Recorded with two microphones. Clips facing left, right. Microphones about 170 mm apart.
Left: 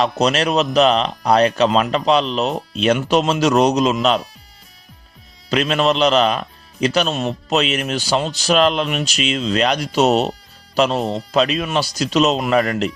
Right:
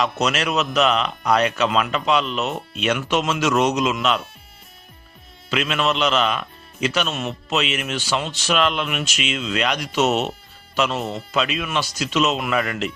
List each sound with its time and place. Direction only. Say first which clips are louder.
0.0 s a man's voice: left 5 dB; 35° left (ahead or behind)
5.5 s a man's voice: left 5 dB; 35° left (ahead or behind)